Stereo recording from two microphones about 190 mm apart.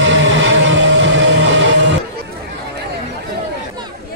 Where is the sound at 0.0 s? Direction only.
75° right (ahead or behind).